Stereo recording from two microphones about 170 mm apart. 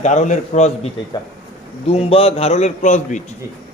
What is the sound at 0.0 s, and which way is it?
Speech, 45° left (ahead or behind).